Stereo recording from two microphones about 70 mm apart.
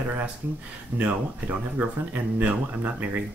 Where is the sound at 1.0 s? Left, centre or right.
Right.